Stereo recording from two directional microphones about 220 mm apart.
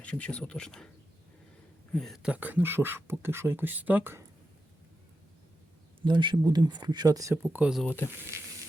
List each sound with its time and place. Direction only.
0.0 s speech: 5° left (ahead or behind)
1.9 s speech: centre (ahead or behind)
6.1 s speech: 20° right (ahead or behind); by 7.9 s 5° right (ahead or behind)
7.9 s speech: 10° left (ahead or behind)